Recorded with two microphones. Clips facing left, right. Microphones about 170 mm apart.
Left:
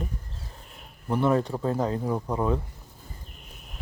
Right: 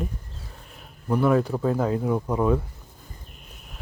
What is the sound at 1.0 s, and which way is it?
Speech, centre (ahead or behind).